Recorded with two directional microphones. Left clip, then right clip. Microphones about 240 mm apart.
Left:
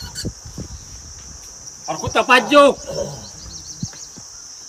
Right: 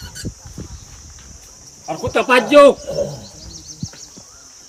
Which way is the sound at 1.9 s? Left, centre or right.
Centre.